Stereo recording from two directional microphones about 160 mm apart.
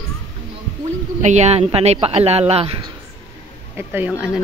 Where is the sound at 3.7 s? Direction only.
10° right (ahead or behind).